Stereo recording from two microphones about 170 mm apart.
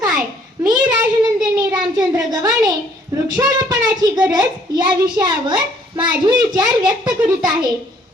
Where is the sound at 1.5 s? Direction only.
25° right (ahead or behind).